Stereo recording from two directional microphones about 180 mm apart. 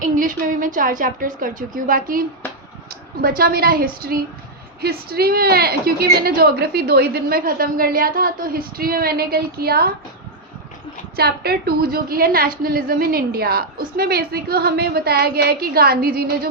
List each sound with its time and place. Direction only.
0.0 s a woman's voice: 50° right (ahead or behind)
11.2 s a woman's voice: 60° right (ahead or behind)